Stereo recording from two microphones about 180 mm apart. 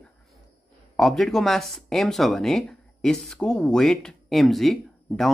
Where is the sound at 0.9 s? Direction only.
Centre (ahead or behind).